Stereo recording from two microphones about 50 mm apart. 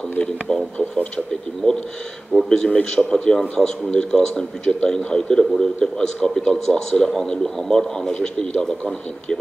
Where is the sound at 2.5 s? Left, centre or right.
Centre.